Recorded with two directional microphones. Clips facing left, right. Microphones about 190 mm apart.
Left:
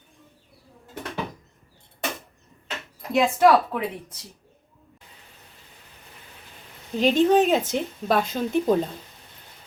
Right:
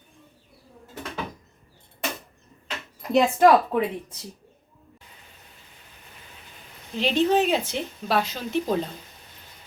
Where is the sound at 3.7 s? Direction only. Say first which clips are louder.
Right 4 dB; 25° right (ahead or behind).